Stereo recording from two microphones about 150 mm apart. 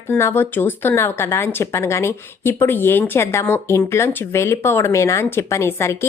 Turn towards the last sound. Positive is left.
turn(degrees=15)  # may be behind; listen again after turning